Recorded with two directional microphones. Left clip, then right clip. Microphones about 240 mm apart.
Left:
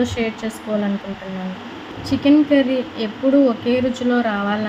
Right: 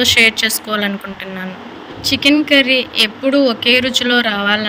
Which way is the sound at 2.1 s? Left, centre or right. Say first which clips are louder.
Right 3 dB; right.